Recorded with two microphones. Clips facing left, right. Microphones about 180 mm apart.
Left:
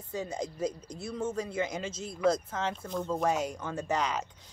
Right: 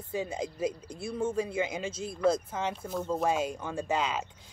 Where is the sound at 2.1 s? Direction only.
25° right (ahead or behind).